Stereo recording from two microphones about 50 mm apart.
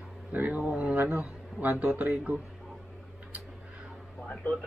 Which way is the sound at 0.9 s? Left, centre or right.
Right.